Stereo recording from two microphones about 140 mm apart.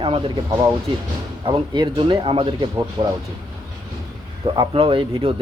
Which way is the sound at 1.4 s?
35° right (ahead or behind).